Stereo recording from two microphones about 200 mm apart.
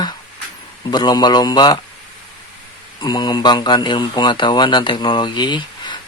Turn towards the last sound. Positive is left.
turn(degrees=25)  # may be behind; listen again after turning